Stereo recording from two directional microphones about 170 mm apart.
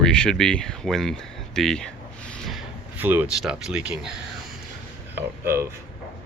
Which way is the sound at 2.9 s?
10° right (ahead or behind).